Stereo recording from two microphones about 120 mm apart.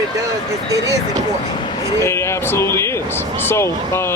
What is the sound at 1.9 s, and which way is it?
Speech, 25° left (ahead or behind).